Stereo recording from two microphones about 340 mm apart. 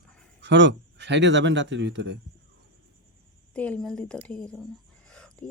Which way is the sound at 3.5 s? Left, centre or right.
Centre.